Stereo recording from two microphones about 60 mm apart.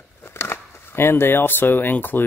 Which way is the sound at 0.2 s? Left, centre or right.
Left.